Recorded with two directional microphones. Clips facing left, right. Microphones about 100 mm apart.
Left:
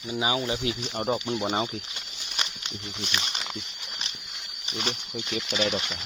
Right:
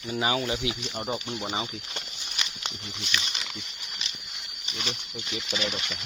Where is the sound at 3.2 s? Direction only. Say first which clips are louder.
Left 2 dB; 40° left (ahead or behind).